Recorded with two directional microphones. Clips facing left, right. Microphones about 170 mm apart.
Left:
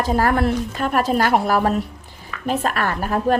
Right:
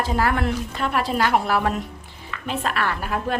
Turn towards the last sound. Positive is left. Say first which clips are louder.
# left 6 dB
turn(degrees=45)  # may be behind; listen again after turning